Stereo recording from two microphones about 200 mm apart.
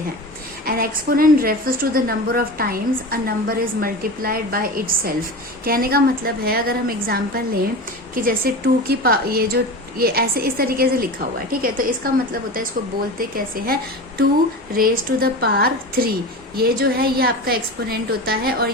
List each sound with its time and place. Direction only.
0.6 s a woman's voice: 45° right (ahead or behind)
14.8 s a woman's voice: 45° right (ahead or behind)